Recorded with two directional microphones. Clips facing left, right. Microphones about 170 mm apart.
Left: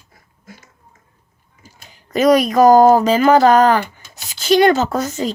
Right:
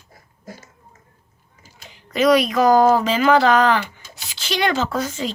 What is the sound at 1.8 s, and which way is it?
Speech, 45° left (ahead or behind).